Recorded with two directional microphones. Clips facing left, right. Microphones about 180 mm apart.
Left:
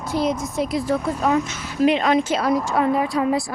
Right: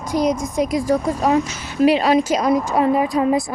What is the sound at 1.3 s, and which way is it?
Speech, 30° right (ahead or behind).